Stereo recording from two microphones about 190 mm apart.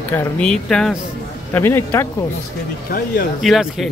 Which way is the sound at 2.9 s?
50° left (ahead or behind).